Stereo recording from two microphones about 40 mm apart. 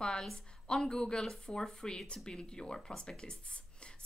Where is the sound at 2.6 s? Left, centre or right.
Centre.